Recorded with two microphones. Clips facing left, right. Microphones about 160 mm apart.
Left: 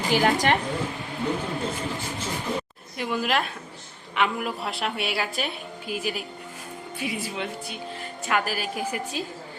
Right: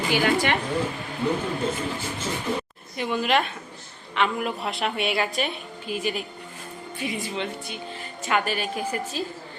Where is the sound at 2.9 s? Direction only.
Centre (ahead or behind).